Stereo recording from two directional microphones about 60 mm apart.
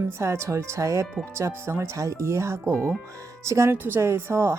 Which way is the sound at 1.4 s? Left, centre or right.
Right.